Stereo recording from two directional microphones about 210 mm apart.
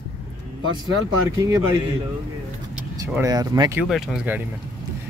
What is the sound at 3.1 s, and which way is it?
Speech, 15° right (ahead or behind).